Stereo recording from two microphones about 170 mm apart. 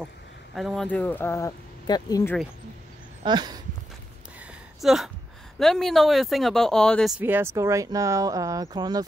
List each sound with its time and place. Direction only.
0.6 s speech: centre (ahead or behind); by 2.3 s 20° left (ahead or behind)
3.3 s speech: 25° right (ahead or behind)
4.8 s speech: centre (ahead or behind)
7.2 s speech: 10° right (ahead or behind)